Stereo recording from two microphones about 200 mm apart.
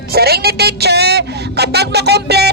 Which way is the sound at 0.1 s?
50° right (ahead or behind).